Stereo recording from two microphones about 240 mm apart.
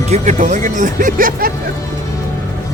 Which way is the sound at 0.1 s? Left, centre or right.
Right.